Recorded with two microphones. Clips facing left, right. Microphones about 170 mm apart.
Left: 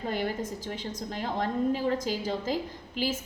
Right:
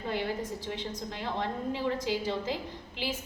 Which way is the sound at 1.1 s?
45° left (ahead or behind).